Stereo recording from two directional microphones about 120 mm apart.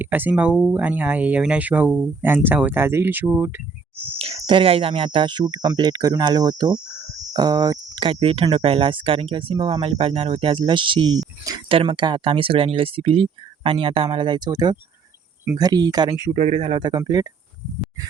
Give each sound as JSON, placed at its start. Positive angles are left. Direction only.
{"t": 0.0, "sound": "speech", "side_deg": -15}
{"t": 4.2, "sound": "speech", "side_deg": -50}
{"t": 16.3, "sound": "speech", "side_deg": -70}
{"t": 16.6, "sound": "speech", "side_deg": -40}